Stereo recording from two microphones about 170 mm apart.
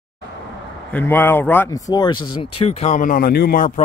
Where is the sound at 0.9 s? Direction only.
10° left (ahead or behind).